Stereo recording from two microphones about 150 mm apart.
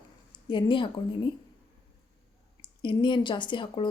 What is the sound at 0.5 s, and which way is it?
Speech, 35° left (ahead or behind).